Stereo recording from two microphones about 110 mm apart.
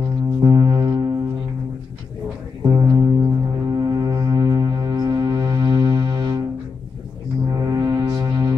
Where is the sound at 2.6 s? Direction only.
35° right (ahead or behind).